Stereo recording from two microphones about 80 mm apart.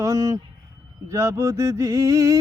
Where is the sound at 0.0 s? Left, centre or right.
Right.